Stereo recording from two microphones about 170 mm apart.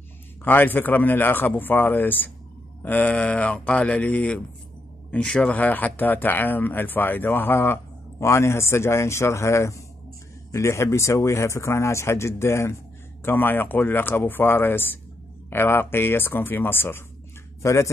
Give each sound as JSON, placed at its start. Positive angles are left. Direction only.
{"t": 0.4, "sound": "speech", "side_deg": 10}